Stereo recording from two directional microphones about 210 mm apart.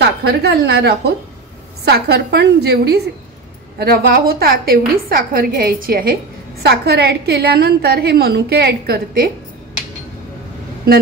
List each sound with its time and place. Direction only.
0.0 s a woman's voice: 50° right (ahead or behind)